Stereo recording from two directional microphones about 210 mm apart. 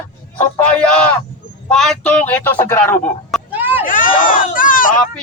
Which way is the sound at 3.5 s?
10° right (ahead or behind).